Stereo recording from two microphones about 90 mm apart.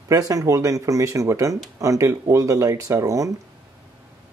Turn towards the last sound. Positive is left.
turn(degrees=-35)  # may be behind; listen again after turning